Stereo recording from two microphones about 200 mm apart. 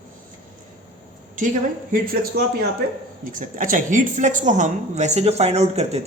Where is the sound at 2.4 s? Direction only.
50° right (ahead or behind).